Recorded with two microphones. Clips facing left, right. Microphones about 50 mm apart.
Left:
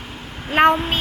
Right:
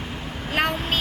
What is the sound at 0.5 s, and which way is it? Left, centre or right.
Speech, left.